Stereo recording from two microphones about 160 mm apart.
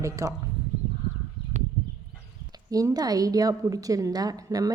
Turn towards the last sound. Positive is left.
turn(degrees=-20)  # may be behind; listen again after turning